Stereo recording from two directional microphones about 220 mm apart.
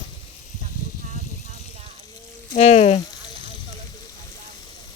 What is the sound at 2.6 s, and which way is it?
Frying, 30° left (ahead or behind).